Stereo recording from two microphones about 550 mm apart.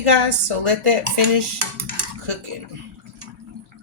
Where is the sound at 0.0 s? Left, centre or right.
Right.